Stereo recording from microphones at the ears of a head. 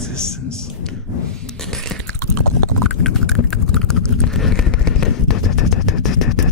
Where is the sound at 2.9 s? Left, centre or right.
Left.